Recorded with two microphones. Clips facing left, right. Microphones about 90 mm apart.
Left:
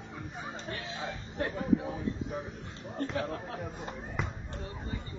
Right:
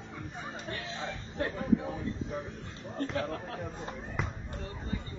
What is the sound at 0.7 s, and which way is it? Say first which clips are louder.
Speech: even; 25° left (ahead or behind).